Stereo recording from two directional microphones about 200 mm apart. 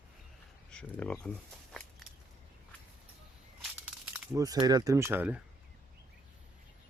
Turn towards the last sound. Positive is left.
turn(degrees=-10)  # may be behind; listen again after turning